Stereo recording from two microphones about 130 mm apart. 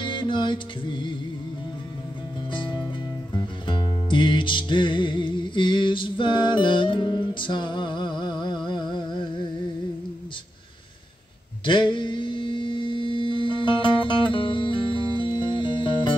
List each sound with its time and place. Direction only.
0.0 s mantra: 40° left (ahead or behind)
2.5 s music: 40° left (ahead or behind)
8.6 s a sound: 35° left (ahead or behind)
11.6 s mantra: 40° left (ahead or behind)
15.1 s music: 40° left (ahead or behind)